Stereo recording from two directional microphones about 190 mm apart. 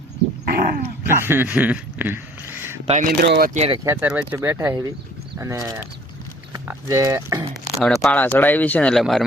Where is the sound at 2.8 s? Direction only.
35° right (ahead or behind).